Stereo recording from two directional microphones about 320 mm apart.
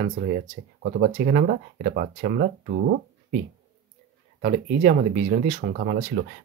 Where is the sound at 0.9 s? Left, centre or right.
Right.